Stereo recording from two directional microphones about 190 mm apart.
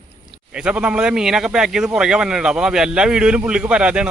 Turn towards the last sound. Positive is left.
turn(degrees=-5)  # may be behind; listen again after turning